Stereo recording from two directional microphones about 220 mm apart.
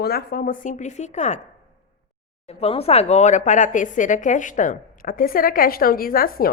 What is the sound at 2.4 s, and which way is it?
A woman's voice, 25° left (ahead or behind).